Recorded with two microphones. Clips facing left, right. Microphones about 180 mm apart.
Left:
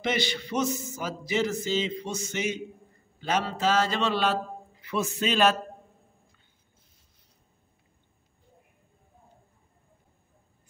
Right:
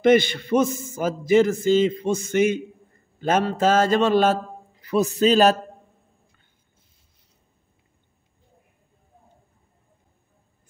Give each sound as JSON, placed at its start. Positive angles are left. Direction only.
{"t": 0.0, "sound": "a man's voice", "side_deg": -50}